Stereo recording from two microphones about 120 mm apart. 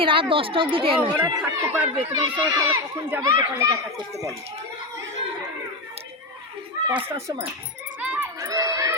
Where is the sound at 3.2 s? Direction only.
25° right (ahead or behind).